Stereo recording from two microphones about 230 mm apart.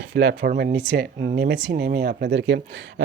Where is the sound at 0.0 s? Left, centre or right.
Right.